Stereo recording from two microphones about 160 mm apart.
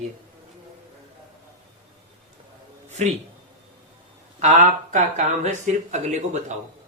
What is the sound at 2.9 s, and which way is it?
Speech, 45° right (ahead or behind).